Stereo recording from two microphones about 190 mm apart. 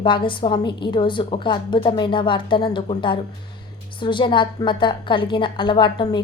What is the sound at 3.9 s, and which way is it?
A woman's voice, 25° left (ahead or behind).